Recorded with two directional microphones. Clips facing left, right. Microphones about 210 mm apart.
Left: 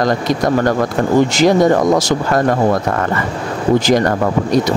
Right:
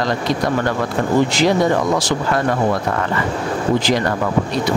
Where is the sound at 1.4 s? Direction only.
45° left (ahead or behind).